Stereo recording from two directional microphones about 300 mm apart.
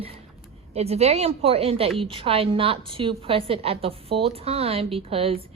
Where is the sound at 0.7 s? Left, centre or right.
Right.